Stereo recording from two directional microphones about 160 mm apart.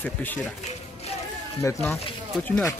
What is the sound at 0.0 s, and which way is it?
Speech, 10° left (ahead or behind).